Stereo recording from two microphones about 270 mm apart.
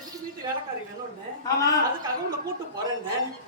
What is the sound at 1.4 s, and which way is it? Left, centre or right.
Speech, centre.